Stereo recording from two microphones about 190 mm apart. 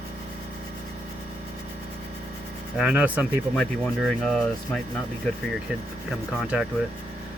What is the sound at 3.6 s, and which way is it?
Speech, 5° left (ahead or behind).